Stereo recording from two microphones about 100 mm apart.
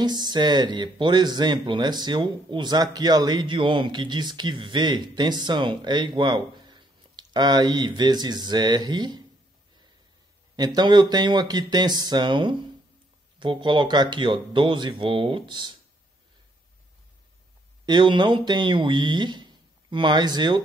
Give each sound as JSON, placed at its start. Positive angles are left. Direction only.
{"t": 0.0, "sound": "speech", "side_deg": -45}
{"t": 10.5, "sound": "speech", "side_deg": -40}
{"t": 17.8, "sound": "speech", "side_deg": -50}